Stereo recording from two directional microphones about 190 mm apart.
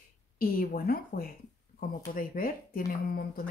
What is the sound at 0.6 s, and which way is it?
Speech, 50° left (ahead or behind).